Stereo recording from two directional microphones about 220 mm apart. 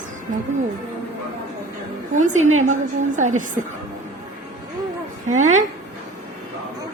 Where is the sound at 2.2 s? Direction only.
35° right (ahead or behind).